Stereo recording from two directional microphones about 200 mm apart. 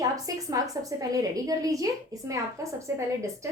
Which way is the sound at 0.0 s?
15° right (ahead or behind).